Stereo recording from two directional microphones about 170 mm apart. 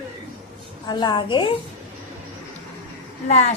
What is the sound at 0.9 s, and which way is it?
Speech, 25° left (ahead or behind).